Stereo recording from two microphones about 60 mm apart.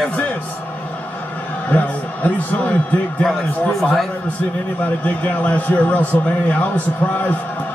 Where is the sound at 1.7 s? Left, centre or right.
Left.